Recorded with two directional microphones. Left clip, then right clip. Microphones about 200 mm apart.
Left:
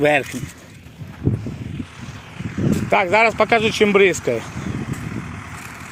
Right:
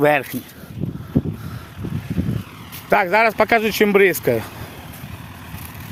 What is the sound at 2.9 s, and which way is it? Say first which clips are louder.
Speech: even; 25° right (ahead or behind).